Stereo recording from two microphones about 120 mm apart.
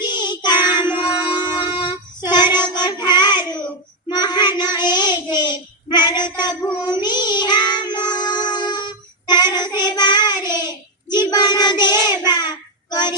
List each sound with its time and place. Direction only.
0.0 s child singing: 35° left (ahead or behind)
6.3 s a sound: 35° left (ahead or behind)
6.7 s child singing: 35° left (ahead or behind)